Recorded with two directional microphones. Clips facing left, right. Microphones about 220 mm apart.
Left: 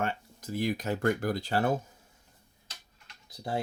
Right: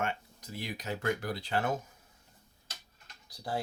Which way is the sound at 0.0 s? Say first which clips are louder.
Left 3 dB; 40° left (ahead or behind).